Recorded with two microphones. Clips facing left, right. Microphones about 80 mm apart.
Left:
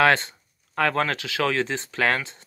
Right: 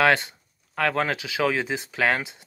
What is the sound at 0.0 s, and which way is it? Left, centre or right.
Speech, centre.